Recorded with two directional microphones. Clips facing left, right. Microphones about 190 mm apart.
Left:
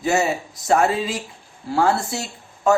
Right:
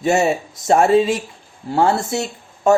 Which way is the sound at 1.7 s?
20° right (ahead or behind).